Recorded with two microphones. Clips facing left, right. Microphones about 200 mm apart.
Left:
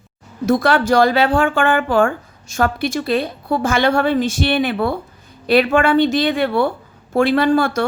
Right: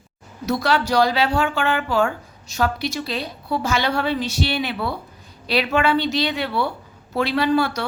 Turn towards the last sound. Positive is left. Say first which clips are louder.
# left 4 dB
turn(degrees=50)  # may be behind; listen again after turning